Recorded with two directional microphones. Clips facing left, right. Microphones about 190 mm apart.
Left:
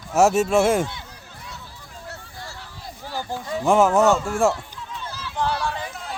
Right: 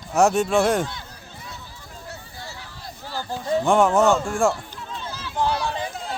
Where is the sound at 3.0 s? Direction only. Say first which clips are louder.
Left 1 dB; 15° left (ahead or behind).